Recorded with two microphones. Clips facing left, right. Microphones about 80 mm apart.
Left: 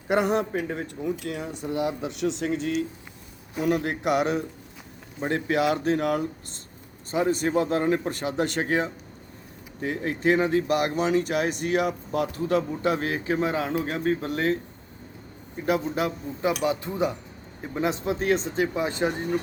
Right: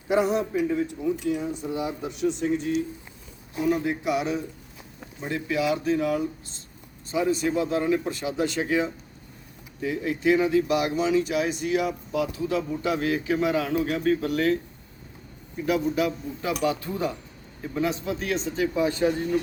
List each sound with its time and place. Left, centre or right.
0.1 s speech: left
1.2 s speech: left
3.6 s a man's voice: left